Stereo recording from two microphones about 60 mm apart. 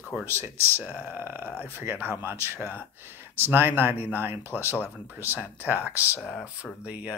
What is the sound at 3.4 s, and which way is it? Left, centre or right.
Speech, right.